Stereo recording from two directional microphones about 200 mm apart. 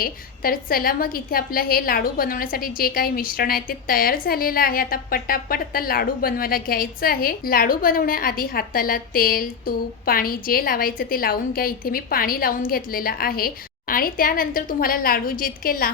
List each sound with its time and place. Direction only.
0.0 s a woman's voice: 45° left (ahead or behind)